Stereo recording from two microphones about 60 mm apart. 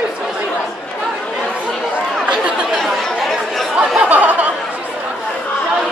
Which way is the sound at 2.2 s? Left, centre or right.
Centre.